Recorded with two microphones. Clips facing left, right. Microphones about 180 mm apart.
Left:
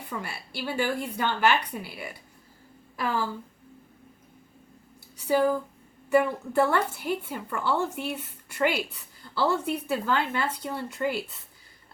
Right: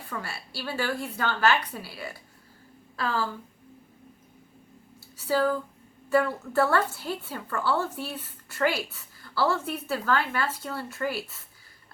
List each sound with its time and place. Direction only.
0.1 s a woman's voice: 20° left (ahead or behind)
5.3 s a woman's voice: 15° left (ahead or behind)